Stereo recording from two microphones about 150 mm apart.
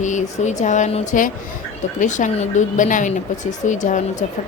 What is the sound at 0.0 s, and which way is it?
A woman's voice, 55° left (ahead or behind).